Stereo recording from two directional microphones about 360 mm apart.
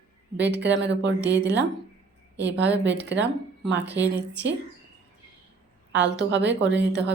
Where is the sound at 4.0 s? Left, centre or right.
Right.